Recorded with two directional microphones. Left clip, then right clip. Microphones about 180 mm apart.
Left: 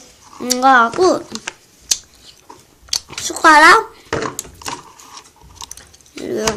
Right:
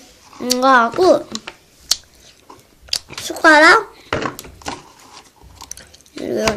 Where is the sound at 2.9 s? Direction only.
Centre (ahead or behind).